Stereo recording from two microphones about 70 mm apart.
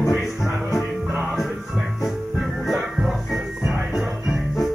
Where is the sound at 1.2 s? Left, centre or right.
Centre.